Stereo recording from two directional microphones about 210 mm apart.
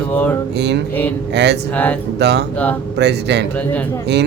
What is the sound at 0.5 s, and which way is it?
Speech, 55° right (ahead or behind).